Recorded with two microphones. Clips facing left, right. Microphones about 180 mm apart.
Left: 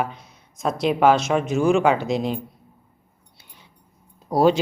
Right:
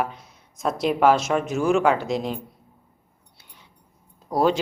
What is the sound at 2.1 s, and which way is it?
Speech, 25° left (ahead or behind).